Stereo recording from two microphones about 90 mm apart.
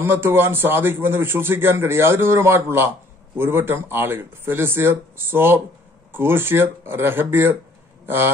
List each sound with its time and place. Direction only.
0.0 s a man's voice: 25° right (ahead or behind)